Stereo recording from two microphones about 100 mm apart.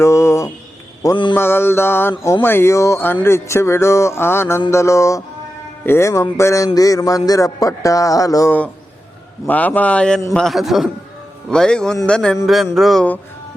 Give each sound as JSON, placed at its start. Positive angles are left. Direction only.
{"t": 0.0, "sound": "mantra", "side_deg": 30}
{"t": 1.1, "sound": "mantra", "side_deg": 55}
{"t": 1.4, "sound": "speech", "side_deg": 25}
{"t": 8.4, "sound": "a man's voice", "side_deg": 15}